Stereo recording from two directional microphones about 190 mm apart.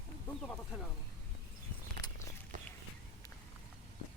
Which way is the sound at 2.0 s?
20° left (ahead or behind).